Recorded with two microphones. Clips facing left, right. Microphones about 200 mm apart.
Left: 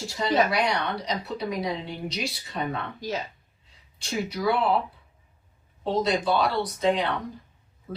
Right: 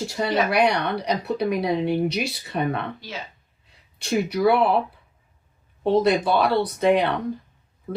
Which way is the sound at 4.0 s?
60° right (ahead or behind).